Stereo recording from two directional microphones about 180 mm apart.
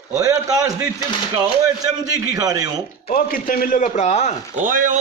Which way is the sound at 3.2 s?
50° left (ahead or behind).